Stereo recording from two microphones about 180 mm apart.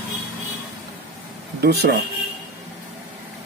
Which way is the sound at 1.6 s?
65° right (ahead or behind).